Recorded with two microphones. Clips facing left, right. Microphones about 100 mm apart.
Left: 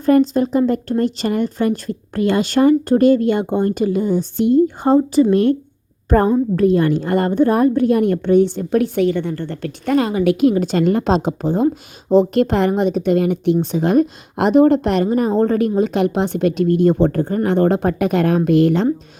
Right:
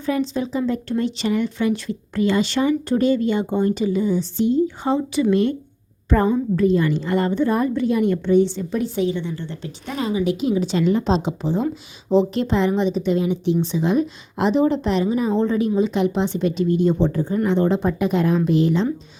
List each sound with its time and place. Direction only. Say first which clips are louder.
0.0 s a woman's voice: left 8 dB; 50° left (ahead or behind)